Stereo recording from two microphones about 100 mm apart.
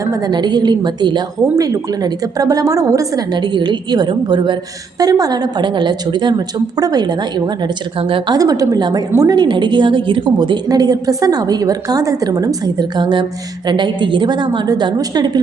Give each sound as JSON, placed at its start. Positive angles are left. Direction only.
{"t": 0.0, "sound": "a woman's voice", "side_deg": -40}
{"t": 3.3, "sound": "a woman's voice", "side_deg": -50}
{"t": 7.9, "sound": "speech", "side_deg": -60}
{"t": 8.3, "sound": "a woman's voice", "side_deg": -40}